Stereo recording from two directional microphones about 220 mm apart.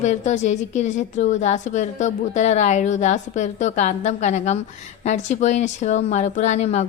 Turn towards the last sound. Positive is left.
turn(degrees=30)  # may be behind; listen again after turning